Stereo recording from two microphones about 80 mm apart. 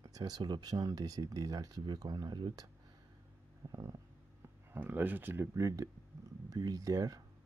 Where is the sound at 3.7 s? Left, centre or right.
Right.